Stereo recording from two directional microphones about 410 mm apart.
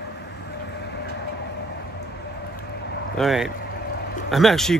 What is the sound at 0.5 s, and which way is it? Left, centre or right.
Train, left.